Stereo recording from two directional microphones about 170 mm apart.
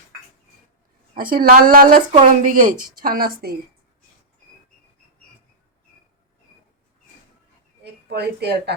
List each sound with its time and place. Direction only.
1.1 s a woman's voice: 60° right (ahead or behind)
8.1 s a woman's voice: 75° right (ahead or behind)